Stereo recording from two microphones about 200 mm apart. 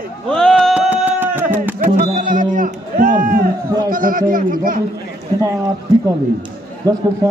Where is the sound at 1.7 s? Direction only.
45° right (ahead or behind).